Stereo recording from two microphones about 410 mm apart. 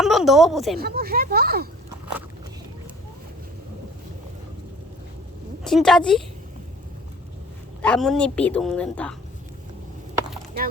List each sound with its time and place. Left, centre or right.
0.0 s a woman's voice: centre
0.8 s speech: right
5.6 s a woman's voice: centre
7.8 s a woman's voice: centre